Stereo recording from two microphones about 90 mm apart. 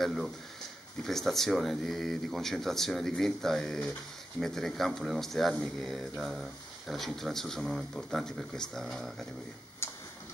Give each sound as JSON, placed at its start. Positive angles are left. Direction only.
{"t": 0.0, "sound": "speech", "side_deg": 0}
{"t": 9.8, "sound": "tick-tock", "side_deg": 30}